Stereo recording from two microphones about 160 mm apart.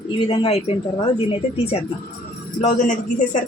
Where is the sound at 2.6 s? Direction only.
45° left (ahead or behind).